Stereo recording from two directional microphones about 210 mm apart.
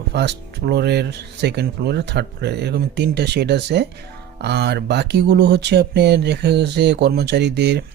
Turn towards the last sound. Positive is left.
turn(degrees=-55)  # may be behind; listen again after turning